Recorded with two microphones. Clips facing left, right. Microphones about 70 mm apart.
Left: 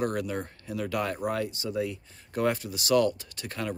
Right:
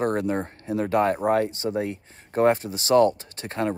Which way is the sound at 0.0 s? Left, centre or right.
Right.